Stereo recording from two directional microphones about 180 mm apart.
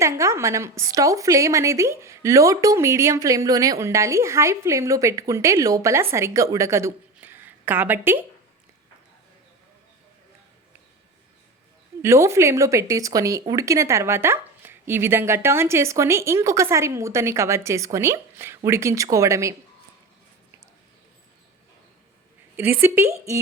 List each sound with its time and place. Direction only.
0.0 s a woman's voice: 15° right (ahead or behind)
12.0 s a woman's voice: 15° right (ahead or behind)
22.5 s a woman's voice: 10° right (ahead or behind)